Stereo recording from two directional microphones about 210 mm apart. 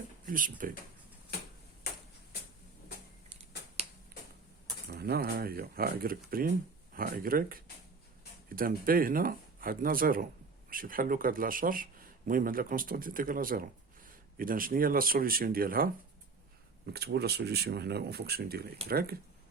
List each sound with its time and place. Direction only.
0.3 s speech: 40° right (ahead or behind)
4.9 s speech: 45° right (ahead or behind)